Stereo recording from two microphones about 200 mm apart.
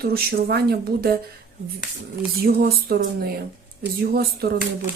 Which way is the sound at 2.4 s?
50° right (ahead or behind).